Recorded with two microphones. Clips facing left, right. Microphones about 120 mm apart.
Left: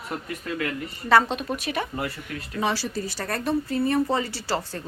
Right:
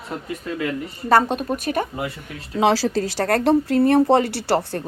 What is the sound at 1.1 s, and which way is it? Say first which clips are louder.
Speech: right 3 dB; 45° right (ahead or behind).